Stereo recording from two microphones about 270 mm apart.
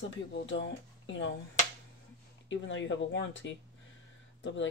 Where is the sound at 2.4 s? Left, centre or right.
Left.